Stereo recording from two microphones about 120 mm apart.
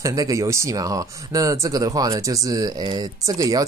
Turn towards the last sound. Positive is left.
turn(degrees=-30)  # may be behind; listen again after turning